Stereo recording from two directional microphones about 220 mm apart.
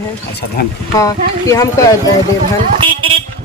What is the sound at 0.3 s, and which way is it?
Speech, 45° left (ahead or behind).